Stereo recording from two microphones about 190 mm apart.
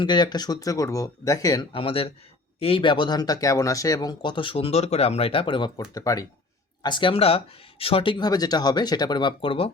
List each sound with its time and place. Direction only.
0.0 s speech: 25° left (ahead or behind)